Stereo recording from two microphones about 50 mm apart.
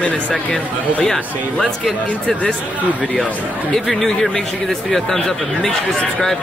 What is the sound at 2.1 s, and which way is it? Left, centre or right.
Speech, left.